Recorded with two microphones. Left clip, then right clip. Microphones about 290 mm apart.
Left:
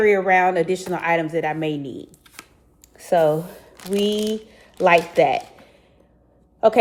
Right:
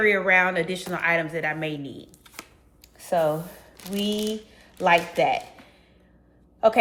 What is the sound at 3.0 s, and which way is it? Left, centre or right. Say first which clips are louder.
A woman's voice: left 6 dB; left.